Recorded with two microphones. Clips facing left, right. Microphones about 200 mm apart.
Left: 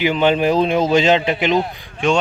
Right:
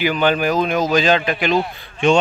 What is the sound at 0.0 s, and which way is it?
Speech, 25° left (ahead or behind).